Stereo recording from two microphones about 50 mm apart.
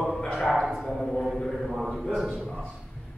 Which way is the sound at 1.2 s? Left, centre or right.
Centre.